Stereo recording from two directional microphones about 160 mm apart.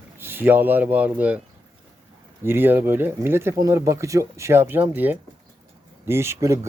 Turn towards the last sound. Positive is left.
turn(degrees=-20)  # may be behind; listen again after turning